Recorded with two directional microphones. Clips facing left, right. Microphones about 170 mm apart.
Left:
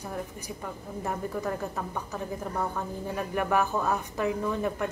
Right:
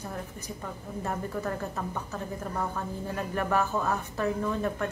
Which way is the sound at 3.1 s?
15° left (ahead or behind).